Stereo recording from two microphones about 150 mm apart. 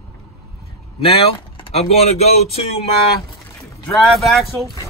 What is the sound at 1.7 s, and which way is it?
Speech, 45° left (ahead or behind).